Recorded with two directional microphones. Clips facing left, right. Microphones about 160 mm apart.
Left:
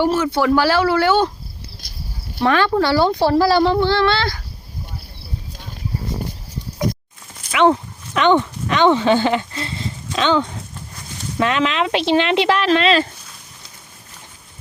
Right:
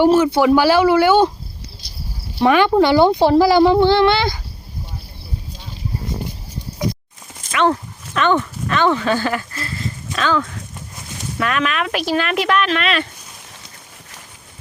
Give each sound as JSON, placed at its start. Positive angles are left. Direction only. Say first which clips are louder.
{"t": 0.0, "sound": "speech", "louder": "right 4 dB", "side_deg": -15}
{"t": 1.8, "sound": "a sound", "louder": "even", "side_deg": 50}
{"t": 2.4, "sound": "speech", "louder": "right 3 dB", "side_deg": -15}
{"t": 7.5, "sound": "speech", "louder": "left 2 dB", "side_deg": 15}